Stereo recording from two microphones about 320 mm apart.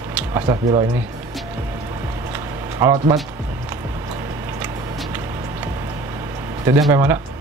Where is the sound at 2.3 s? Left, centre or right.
Centre.